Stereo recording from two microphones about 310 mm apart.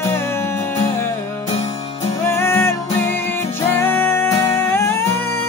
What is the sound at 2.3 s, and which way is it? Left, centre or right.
Music, centre.